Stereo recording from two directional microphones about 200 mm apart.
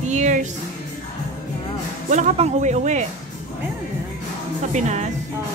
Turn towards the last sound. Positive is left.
turn(degrees=-35)  # may be behind; listen again after turning